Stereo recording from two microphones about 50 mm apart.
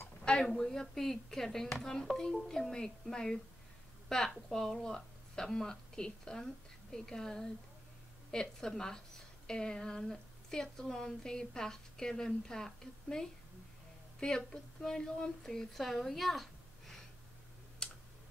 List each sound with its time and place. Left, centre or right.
0.2 s a sound: centre
0.5 s a woman's voice: centre
17.8 s tick: centre